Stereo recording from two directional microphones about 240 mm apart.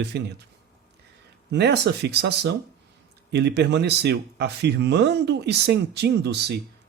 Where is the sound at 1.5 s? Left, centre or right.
Right.